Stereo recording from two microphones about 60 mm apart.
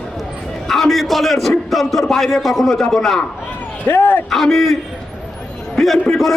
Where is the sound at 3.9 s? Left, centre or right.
Left.